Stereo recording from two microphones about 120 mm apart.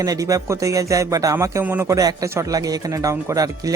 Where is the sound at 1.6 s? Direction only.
15° right (ahead or behind).